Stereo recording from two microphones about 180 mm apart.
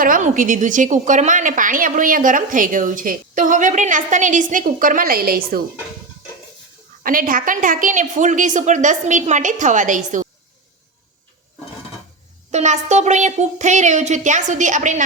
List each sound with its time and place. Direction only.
0.0 s a woman's voice: 50° right (ahead or behind)
7.0 s a woman's voice: 50° right (ahead or behind)
12.5 s speech: 40° right (ahead or behind)